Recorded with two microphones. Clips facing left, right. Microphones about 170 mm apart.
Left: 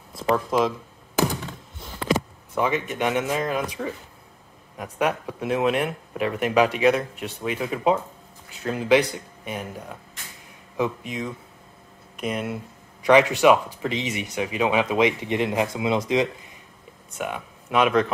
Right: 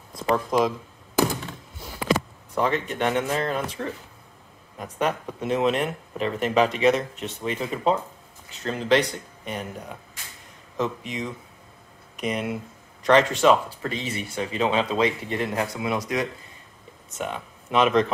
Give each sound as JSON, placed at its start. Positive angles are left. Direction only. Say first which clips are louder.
{"t": 0.3, "sound": "speech", "louder": "even", "side_deg": 0}
{"t": 2.5, "sound": "speech", "louder": "even", "side_deg": 10}
{"t": 17.2, "sound": "speech", "louder": "left 1 dB", "side_deg": 5}